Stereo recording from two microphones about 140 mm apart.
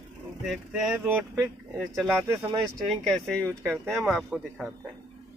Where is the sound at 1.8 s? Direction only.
Centre (ahead or behind).